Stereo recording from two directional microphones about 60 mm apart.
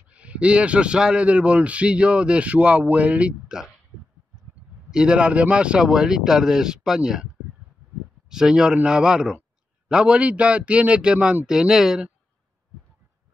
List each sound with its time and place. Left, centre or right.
0.1 s a man's voice: right
4.9 s speech: centre
8.3 s a man's voice: centre